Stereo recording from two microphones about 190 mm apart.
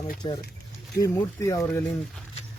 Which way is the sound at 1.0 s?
15° left (ahead or behind).